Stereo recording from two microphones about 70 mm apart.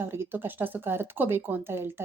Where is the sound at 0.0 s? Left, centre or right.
Right.